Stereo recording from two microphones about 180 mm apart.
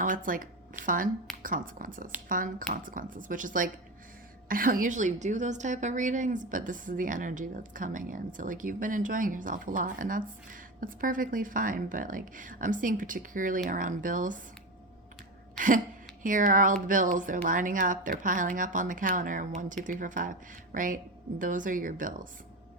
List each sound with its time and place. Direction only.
0.0 s a woman's voice: 50° right (ahead or behind)
15.5 s a sound: 45° right (ahead or behind)
16.2 s a woman's voice: 45° right (ahead or behind)